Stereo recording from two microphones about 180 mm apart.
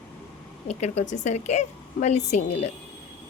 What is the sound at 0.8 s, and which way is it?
A woman's voice, 40° left (ahead or behind).